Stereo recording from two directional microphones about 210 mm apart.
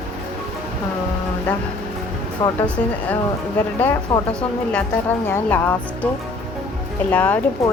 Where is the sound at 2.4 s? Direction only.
20° left (ahead or behind).